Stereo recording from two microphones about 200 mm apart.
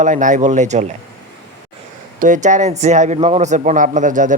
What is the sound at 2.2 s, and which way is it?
A man's voice, 40° right (ahead or behind).